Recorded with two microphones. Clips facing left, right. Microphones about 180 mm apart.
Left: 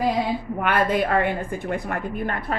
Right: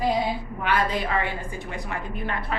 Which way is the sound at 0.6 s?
55° left (ahead or behind).